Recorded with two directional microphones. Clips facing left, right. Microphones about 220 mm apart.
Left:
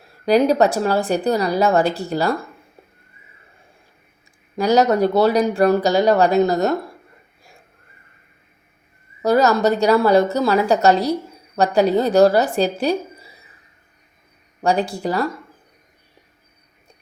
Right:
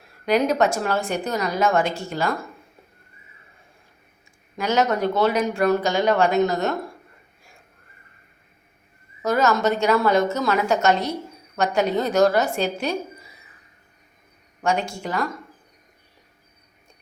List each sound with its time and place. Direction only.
0.3 s speech: 35° left (ahead or behind)
4.5 s speech: 35° left (ahead or behind)
9.2 s speech: 35° left (ahead or behind)
14.6 s speech: 35° left (ahead or behind)